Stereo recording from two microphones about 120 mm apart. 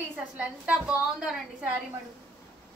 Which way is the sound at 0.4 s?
10° right (ahead or behind).